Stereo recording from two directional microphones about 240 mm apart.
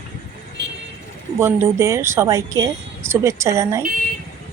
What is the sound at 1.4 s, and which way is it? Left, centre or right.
Speech, centre.